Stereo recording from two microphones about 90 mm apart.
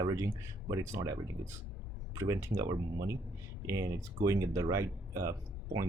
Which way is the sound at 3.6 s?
35° right (ahead or behind).